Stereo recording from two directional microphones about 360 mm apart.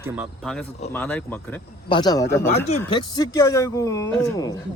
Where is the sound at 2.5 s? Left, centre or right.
Centre.